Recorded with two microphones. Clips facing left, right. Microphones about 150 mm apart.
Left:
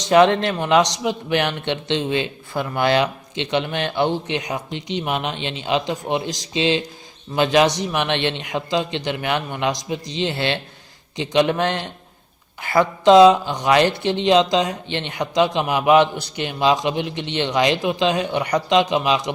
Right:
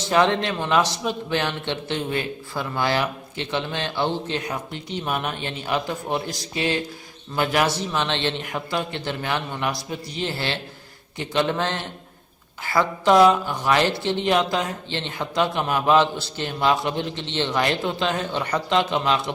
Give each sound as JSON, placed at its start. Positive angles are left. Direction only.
{"t": 0.0, "sound": "a man's voice", "side_deg": 20}